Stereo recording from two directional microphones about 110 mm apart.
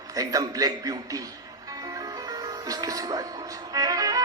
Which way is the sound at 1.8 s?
35° right (ahead or behind).